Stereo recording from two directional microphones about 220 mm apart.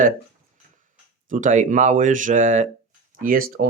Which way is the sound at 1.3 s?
35° right (ahead or behind).